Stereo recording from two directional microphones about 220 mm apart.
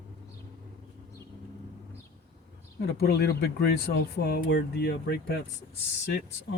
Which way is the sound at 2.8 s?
45° left (ahead or behind).